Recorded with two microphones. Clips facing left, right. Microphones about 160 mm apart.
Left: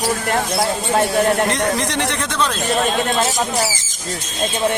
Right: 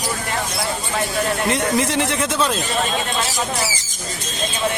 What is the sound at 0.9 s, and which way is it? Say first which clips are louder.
Speech: left 7 dB; 45° left (ahead or behind).